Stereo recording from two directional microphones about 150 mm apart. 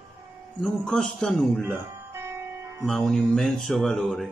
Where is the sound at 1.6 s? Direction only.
15° right (ahead or behind).